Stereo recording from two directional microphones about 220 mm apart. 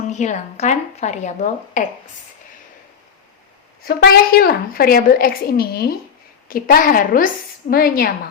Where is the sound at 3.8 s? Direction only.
45° left (ahead or behind).